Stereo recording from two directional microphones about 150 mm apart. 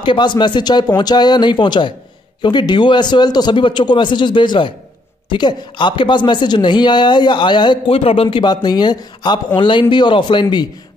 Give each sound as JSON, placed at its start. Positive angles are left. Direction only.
{"t": 0.0, "sound": "speech", "side_deg": 30}